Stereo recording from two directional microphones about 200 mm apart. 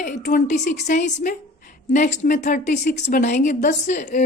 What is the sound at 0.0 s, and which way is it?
A woman's voice, 40° left (ahead or behind).